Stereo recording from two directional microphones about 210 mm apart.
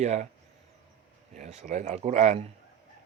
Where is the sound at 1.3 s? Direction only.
35° right (ahead or behind).